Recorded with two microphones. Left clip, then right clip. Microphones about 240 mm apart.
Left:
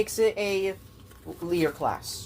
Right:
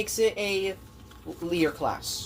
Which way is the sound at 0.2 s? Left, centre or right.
Centre.